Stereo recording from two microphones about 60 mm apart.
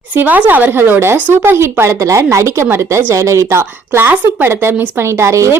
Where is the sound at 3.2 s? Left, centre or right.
Right.